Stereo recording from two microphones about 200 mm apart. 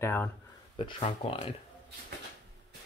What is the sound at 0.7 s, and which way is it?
Speech, 30° left (ahead or behind).